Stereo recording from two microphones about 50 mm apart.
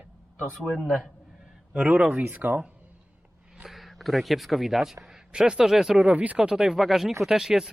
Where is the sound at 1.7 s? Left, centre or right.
Centre.